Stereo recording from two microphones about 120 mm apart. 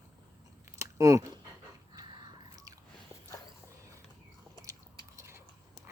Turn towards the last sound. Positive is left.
turn(degrees=-25)  # may be behind; listen again after turning